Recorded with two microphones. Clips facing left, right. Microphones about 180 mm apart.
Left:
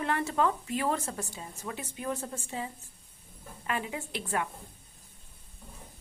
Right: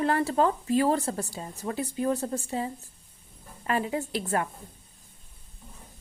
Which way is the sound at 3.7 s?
40° right (ahead or behind).